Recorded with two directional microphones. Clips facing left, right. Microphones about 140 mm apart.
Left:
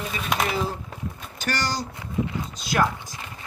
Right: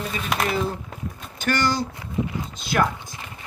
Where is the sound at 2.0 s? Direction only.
20° right (ahead or behind).